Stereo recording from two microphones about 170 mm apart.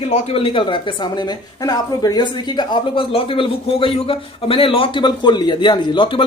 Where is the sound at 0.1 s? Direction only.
35° left (ahead or behind).